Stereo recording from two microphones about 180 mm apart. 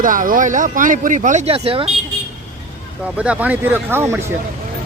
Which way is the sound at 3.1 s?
5° right (ahead or behind).